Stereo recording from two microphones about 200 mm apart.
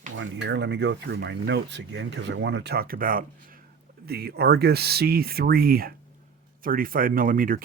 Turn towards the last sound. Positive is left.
turn(degrees=-45)  # may be behind; listen again after turning